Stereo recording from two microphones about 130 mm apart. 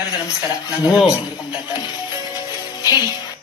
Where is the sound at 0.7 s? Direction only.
10° right (ahead or behind).